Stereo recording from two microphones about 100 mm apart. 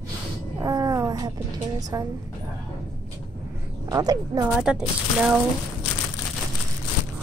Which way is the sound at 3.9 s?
35° right (ahead or behind).